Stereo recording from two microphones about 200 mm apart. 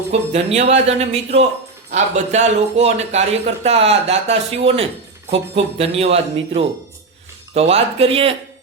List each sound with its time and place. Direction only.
0.1 s a man's voice: 30° right (ahead or behind)